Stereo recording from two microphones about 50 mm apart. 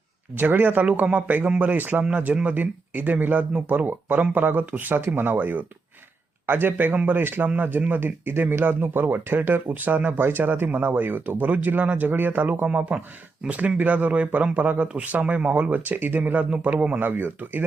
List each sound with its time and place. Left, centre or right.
0.3 s speech: right
0.9 s speech: right
12.6 s speech: right
15.7 s speech: right
17.0 s speech: right